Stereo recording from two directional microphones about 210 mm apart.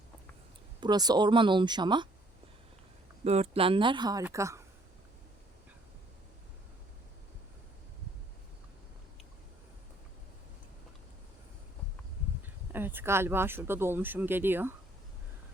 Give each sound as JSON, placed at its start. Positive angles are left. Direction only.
{"t": 0.8, "sound": "speech", "side_deg": -20}
{"t": 3.2, "sound": "a woman's voice", "side_deg": -30}
{"t": 12.4, "sound": "speech", "side_deg": -10}